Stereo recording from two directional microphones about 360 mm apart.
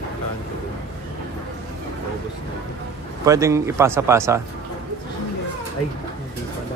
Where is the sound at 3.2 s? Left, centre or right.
Centre.